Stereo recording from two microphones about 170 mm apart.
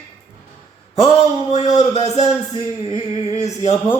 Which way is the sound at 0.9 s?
35° left (ahead or behind).